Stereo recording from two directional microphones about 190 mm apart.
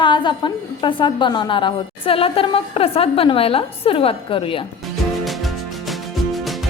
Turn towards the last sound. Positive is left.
turn(degrees=0)  # may be behind; listen again after turning